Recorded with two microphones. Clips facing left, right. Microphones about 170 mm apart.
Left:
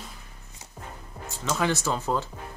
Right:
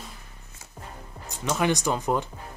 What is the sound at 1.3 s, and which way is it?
Speech, 15° right (ahead or behind).